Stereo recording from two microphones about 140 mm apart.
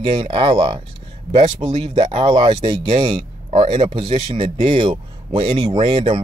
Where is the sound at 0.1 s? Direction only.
40° right (ahead or behind).